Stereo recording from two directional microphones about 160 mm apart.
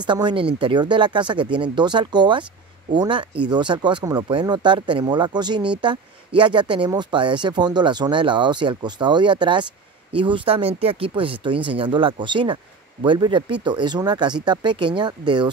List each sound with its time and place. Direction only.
0.0 s speech: 30° right (ahead or behind)